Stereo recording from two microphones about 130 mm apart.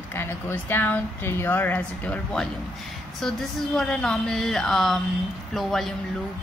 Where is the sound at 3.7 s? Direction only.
5° left (ahead or behind).